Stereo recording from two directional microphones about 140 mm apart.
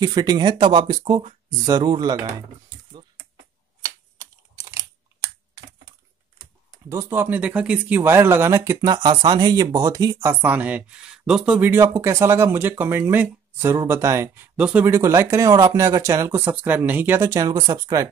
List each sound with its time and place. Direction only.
0.0 s speech: 30° right (ahead or behind)
3.8 s computer keyboard: 25° right (ahead or behind)
6.9 s speech: 20° right (ahead or behind)
10.4 s speech: 10° right (ahead or behind)
15.0 s speech: 20° right (ahead or behind)